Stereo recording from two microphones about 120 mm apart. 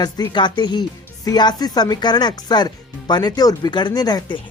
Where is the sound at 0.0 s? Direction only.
35° left (ahead or behind).